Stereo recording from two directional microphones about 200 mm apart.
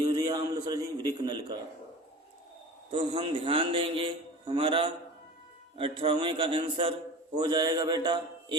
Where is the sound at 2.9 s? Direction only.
25° right (ahead or behind).